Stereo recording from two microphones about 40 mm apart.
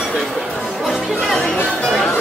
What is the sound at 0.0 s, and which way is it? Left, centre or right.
Chatter, centre.